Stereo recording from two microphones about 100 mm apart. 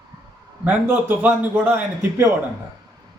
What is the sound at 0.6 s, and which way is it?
A man's voice, 20° right (ahead or behind).